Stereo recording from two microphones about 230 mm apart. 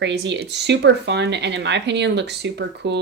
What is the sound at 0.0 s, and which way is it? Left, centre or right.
Speech, right.